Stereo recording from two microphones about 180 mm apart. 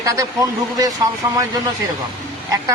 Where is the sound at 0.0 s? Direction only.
20° right (ahead or behind).